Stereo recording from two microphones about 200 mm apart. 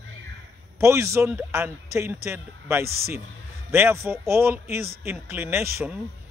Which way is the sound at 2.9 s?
50° right (ahead or behind).